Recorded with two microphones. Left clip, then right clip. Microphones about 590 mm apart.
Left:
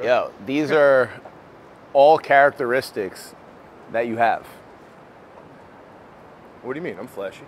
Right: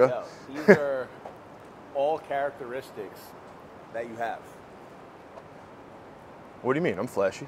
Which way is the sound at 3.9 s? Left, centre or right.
Left.